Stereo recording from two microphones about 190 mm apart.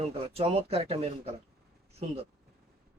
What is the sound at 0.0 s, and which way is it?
Speech, 30° right (ahead or behind).